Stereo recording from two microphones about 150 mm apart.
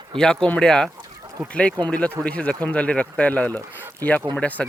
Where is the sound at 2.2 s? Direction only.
10° left (ahead or behind).